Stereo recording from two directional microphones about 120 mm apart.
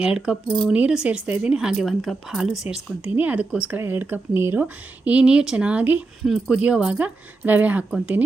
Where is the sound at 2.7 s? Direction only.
15° right (ahead or behind).